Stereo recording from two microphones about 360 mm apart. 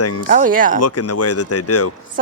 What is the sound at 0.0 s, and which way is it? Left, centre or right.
Speech, left.